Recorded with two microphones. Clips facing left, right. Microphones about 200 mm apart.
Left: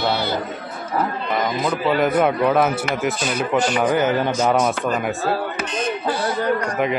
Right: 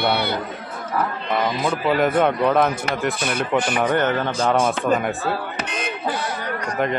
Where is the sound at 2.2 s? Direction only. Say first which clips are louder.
Left 1 dB; 5° left (ahead or behind).